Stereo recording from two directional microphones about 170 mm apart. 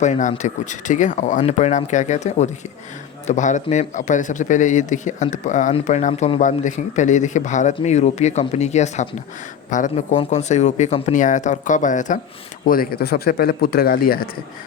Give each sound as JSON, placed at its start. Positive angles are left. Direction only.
{"t": 0.0, "sound": "a man's voice", "side_deg": 45}